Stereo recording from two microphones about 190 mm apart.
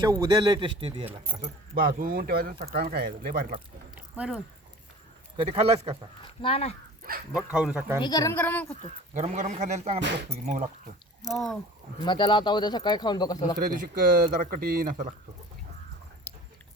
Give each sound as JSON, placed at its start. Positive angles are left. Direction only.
{"t": 0.0, "sound": "speech", "side_deg": -20}
{"t": 1.4, "sound": "speech", "side_deg": -50}
{"t": 3.9, "sound": "a sound", "side_deg": -5}
{"t": 5.4, "sound": "a man's voice", "side_deg": -30}
{"t": 6.4, "sound": "speech", "side_deg": 30}
{"t": 7.3, "sound": "speech", "side_deg": -5}
{"t": 8.0, "sound": "a woman's voice", "side_deg": 20}
{"t": 9.1, "sound": "a man's voice", "side_deg": -40}
{"t": 12.0, "sound": "speech", "side_deg": 25}
{"t": 13.6, "sound": "speech", "side_deg": -50}